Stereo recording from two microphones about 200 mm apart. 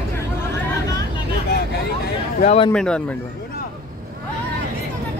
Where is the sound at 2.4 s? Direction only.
25° left (ahead or behind).